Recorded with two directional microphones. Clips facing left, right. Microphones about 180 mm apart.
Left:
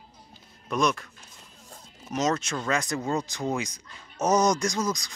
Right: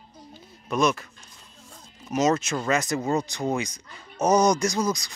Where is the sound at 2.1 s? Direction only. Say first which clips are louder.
Right 4 dB; 5° right (ahead or behind).